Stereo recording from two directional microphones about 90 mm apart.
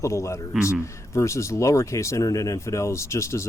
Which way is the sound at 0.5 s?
15° right (ahead or behind).